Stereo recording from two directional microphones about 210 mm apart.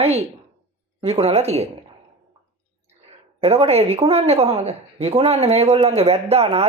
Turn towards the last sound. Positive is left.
turn(degrees=-30)  # may be behind; listen again after turning